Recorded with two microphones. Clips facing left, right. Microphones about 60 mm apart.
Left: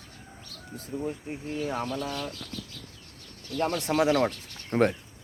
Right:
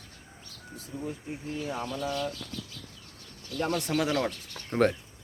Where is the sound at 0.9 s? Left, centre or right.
Left.